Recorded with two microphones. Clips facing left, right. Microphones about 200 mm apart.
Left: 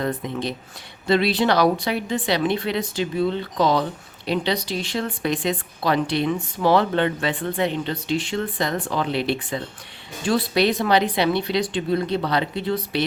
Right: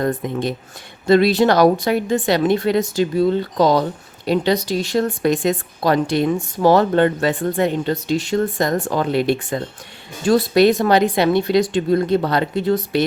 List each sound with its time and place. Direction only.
0.0 s speech: 50° right (ahead or behind)